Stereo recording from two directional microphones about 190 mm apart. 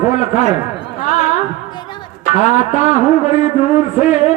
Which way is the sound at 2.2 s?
35° left (ahead or behind).